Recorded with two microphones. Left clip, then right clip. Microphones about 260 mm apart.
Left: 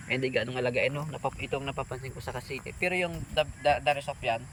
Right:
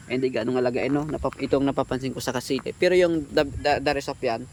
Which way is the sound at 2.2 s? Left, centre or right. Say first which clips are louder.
Right 10 dB; right.